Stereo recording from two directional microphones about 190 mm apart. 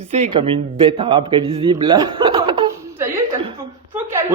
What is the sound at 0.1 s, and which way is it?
A man's voice, 30° right (ahead or behind).